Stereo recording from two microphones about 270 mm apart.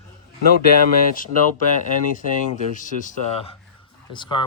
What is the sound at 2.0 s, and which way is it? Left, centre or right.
Speech, left.